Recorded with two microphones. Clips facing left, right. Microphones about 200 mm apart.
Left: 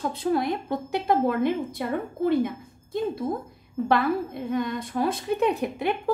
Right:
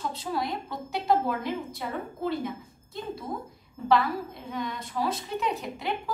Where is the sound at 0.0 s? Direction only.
55° left (ahead or behind).